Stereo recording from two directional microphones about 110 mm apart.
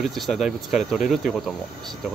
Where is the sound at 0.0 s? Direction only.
Centre (ahead or behind).